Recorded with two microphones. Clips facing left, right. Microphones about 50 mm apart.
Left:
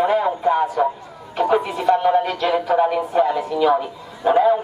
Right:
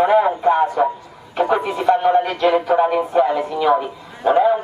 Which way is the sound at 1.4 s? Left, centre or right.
Centre.